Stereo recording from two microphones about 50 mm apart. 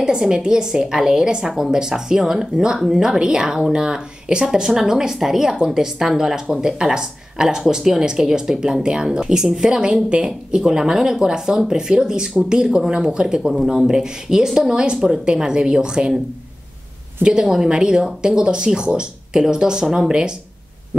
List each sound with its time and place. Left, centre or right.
0.0 s speech: centre
17.2 s speech: centre